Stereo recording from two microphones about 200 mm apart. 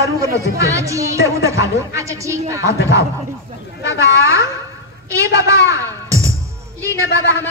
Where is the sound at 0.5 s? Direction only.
15° right (ahead or behind).